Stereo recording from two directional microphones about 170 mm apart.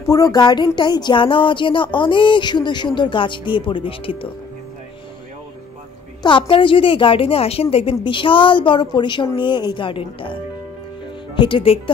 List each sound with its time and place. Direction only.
0.1 s speech: 20° left (ahead or behind)
6.2 s a woman's voice: 30° left (ahead or behind)
11.3 s speech: 30° left (ahead or behind)